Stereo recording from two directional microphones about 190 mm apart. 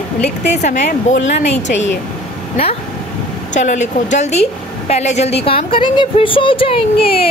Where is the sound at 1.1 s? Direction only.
80° left.